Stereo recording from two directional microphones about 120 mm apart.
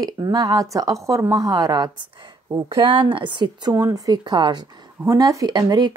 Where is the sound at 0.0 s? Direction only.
30° right (ahead or behind).